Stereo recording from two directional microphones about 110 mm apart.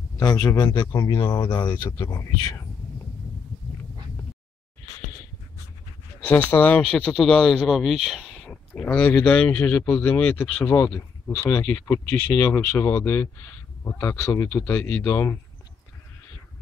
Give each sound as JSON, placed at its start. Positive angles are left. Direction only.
{"t": 0.4, "sound": "speech", "side_deg": 25}
{"t": 0.7, "sound": "speech", "side_deg": 35}
{"t": 1.5, "sound": "speech", "side_deg": 45}
{"t": 6.2, "sound": "speech", "side_deg": 15}